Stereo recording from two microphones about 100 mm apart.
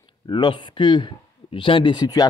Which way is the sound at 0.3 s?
50° left (ahead or behind).